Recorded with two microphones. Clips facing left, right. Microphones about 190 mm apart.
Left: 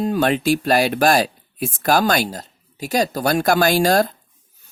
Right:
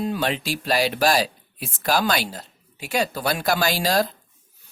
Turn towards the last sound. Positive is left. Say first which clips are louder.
# left 6 dB
turn(degrees=50)  # may be behind; listen again after turning